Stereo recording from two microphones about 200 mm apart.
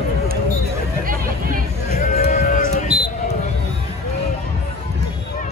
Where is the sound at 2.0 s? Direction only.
45° left (ahead or behind).